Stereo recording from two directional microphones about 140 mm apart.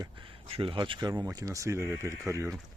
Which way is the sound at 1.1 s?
25° right (ahead or behind).